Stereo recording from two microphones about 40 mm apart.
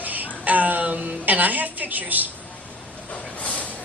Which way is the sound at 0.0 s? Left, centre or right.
Right.